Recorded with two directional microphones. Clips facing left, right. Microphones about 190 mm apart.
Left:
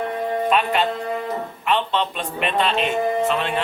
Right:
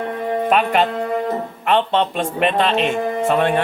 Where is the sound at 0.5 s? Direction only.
45° right (ahead or behind).